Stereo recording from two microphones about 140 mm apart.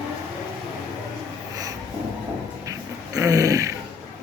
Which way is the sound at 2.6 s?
25° right (ahead or behind).